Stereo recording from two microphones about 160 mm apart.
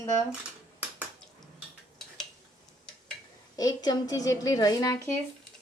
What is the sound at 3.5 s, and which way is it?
A woman's voice, 25° left (ahead or behind).